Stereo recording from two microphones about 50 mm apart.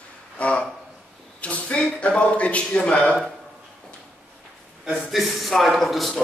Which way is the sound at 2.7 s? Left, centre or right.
Left.